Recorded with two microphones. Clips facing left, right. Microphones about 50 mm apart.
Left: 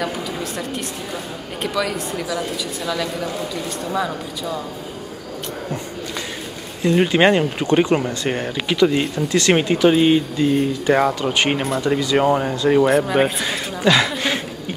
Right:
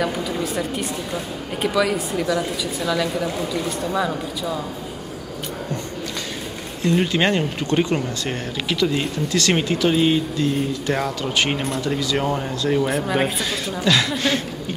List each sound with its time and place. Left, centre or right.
0.0 s a woman's voice: centre
6.8 s speech: centre
11.6 s a woman's voice: centre
11.9 s speech: centre
12.8 s speech: centre